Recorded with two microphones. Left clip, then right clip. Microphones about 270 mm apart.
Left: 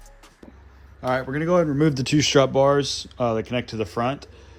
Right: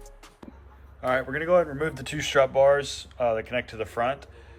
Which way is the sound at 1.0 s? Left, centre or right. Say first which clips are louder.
Left 1 dB; centre.